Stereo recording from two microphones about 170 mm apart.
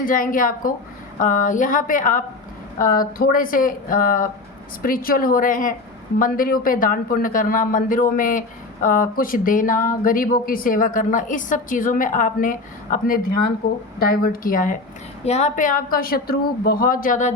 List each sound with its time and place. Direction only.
0.0 s speech: 55° left (ahead or behind)
15.2 s speech: 40° left (ahead or behind)